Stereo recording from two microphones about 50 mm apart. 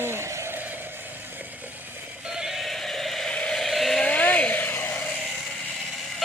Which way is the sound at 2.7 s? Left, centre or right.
Centre.